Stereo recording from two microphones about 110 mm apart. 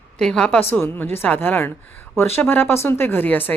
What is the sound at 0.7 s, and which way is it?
Speech, 20° left (ahead or behind).